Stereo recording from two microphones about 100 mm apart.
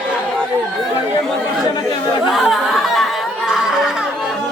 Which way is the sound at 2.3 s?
Centre (ahead or behind).